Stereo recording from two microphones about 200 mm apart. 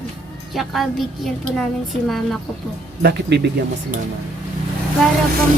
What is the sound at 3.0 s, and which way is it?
Speech, 55° right (ahead or behind).